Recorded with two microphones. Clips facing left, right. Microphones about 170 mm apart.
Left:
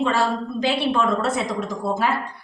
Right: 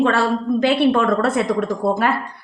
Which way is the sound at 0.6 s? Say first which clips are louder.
Right 5 dB; 60° right (ahead or behind).